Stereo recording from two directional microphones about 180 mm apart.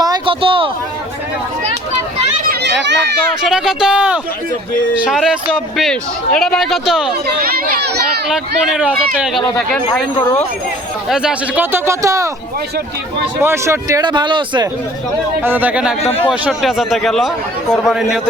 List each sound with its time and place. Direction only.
0.0 s a sound: 25° right (ahead or behind)
2.4 s a sound: 60° right (ahead or behind); by 3.0 s 75° right (ahead or behind)
3.4 s speech: centre (ahead or behind)
7.4 s a child's voice: 60° right (ahead or behind)
8.3 s speech: 5° right (ahead or behind)
11.1 s speech: 5° right (ahead or behind)
13.4 s speech: 15° right (ahead or behind)
15.4 s speech: 10° right (ahead or behind)
16.0 s speech: 35° left (ahead or behind)
16.3 s speech: 5° right (ahead or behind)